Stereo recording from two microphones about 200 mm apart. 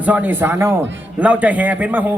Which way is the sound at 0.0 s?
10° right (ahead or behind).